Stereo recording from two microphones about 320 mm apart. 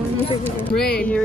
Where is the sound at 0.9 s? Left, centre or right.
Centre.